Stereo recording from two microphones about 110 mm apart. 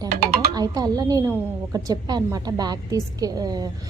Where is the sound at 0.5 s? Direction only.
35° right (ahead or behind).